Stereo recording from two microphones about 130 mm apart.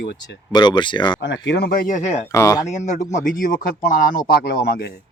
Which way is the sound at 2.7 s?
65° left (ahead or behind).